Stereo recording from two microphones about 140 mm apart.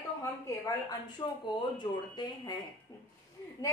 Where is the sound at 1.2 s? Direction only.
25° left (ahead or behind).